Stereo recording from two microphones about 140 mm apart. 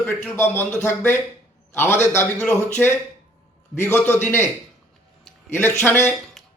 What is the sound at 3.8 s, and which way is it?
Speech, 15° left (ahead or behind).